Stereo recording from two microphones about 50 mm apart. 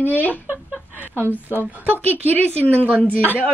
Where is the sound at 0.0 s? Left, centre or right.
Left.